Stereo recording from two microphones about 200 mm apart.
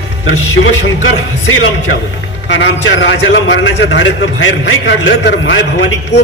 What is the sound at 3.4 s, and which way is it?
A man's voice, 75° left (ahead or behind).